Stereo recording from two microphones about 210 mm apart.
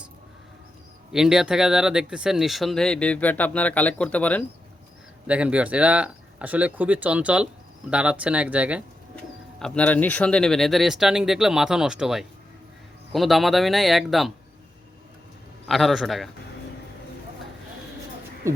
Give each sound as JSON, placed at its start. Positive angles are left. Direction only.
{"t": 1.1, "sound": "speech", "side_deg": 0}
{"t": 5.2, "sound": "speech", "side_deg": -5}
{"t": 15.6, "sound": "speech", "side_deg": 0}
{"t": 18.4, "sound": "a sound", "side_deg": -10}